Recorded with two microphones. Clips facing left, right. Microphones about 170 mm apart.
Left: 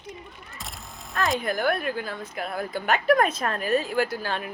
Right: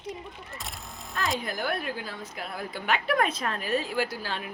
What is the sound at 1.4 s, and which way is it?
A woman's voice, 55° left (ahead or behind).